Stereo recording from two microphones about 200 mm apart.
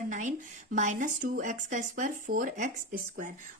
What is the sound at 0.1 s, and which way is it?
A woman's voice, 40° right (ahead or behind).